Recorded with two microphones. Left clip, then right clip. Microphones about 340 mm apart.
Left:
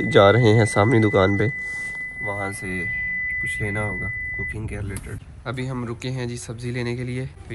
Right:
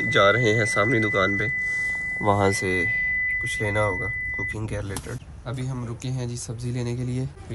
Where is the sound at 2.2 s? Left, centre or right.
Centre.